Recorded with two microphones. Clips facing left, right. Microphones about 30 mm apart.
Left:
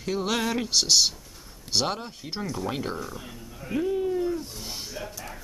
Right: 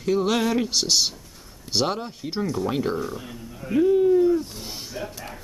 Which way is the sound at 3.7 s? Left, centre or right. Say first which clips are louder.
Right 8 dB; centre.